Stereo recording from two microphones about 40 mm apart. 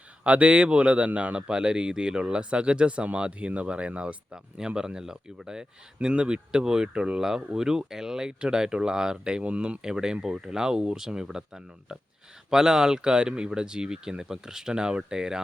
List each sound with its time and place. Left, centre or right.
0.3 s a man's voice: right; by 9.4 s centre
9.4 s a man's voice: right